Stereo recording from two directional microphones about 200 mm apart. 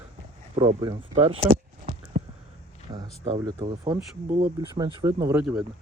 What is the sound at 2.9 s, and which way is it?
Speech, 30° right (ahead or behind).